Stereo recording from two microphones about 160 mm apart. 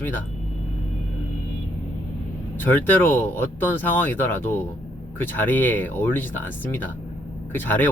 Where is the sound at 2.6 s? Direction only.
10° left (ahead or behind).